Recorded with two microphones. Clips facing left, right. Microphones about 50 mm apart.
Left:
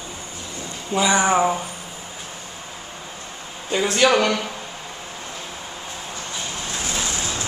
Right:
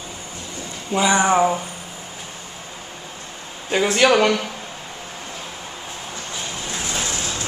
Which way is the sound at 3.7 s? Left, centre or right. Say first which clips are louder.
Right 2 dB; centre.